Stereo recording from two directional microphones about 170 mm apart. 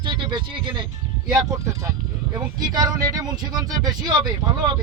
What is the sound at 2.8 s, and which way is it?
Speech, 20° right (ahead or behind).